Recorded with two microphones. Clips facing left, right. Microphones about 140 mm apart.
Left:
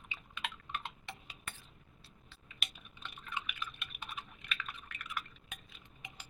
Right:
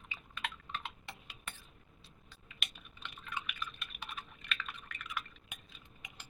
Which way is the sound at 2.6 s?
5° left (ahead or behind).